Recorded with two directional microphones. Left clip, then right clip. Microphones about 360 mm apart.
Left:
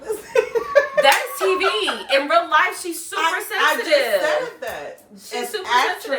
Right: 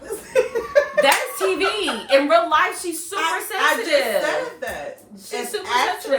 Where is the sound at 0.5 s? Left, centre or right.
Centre.